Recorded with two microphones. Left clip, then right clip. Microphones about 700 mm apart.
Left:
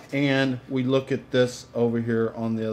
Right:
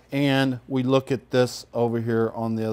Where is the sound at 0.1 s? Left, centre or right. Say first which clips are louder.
Right 1 dB; right.